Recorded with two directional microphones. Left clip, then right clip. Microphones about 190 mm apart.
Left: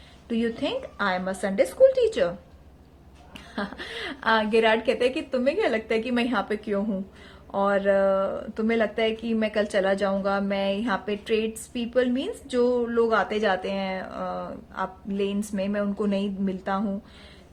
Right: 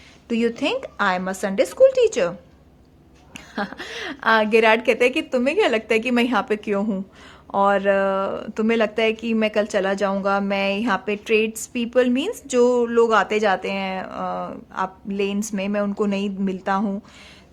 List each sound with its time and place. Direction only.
0.3 s speech: 30° right (ahead or behind)
3.3 s speech: 20° right (ahead or behind)